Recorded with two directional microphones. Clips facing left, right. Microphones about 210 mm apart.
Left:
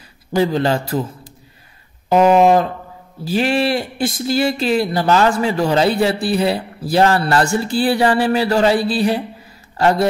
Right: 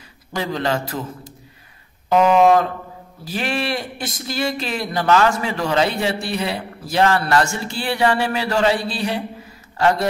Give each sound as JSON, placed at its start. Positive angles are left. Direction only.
{"t": 0.3, "sound": "speech", "side_deg": 30}